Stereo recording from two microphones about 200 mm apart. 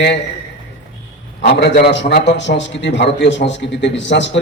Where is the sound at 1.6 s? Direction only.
60° left (ahead or behind).